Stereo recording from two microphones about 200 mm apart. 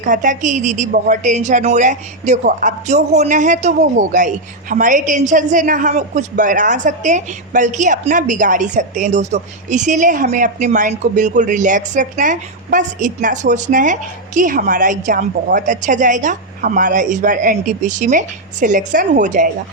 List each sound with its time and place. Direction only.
0.0 s a woman's voice: 40° right (ahead or behind)